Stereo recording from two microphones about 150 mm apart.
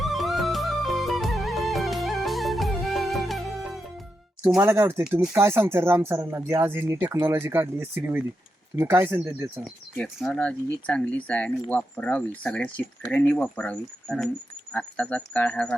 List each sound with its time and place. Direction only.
0.0 s music: centre (ahead or behind)
4.5 s speech: 15° right (ahead or behind)
10.2 s speech: centre (ahead or behind)